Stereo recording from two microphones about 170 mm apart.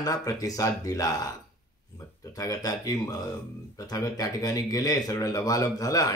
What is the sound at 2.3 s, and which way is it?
A man's voice, 20° left (ahead or behind).